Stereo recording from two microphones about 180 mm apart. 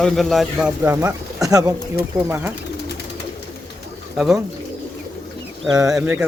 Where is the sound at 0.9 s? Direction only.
20° right (ahead or behind).